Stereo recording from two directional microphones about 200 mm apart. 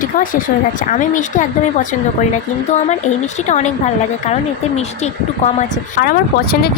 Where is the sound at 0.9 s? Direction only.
40° left (ahead or behind).